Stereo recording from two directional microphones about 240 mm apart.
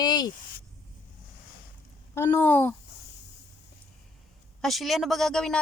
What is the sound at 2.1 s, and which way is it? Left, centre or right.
Speech, centre.